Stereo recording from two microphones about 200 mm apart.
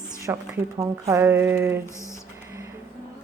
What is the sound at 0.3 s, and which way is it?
A woman's voice, 15° right (ahead or behind).